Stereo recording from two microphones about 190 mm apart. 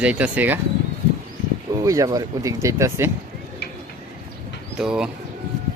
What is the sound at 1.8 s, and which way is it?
Speech, 15° right (ahead or behind).